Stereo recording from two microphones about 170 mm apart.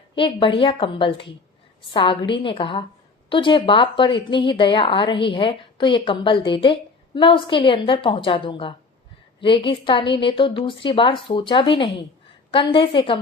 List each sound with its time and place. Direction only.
0.2 s a woman's voice: 30° left (ahead or behind)